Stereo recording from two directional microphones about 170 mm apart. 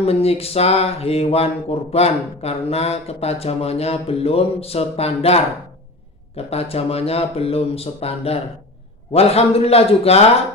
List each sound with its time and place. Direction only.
0.0 s speech: 35° left (ahead or behind)